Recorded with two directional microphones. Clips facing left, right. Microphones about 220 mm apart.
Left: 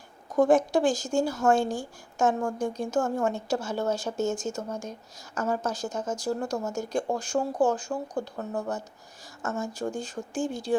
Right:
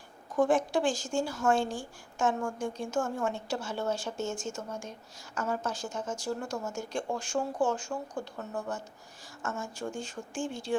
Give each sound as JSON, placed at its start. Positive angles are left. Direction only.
{"t": 0.3, "sound": "speech", "side_deg": 40}